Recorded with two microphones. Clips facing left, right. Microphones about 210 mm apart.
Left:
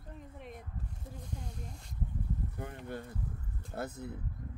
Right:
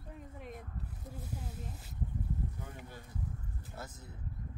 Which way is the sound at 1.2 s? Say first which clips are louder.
Right 1 dB; 5° right (ahead or behind).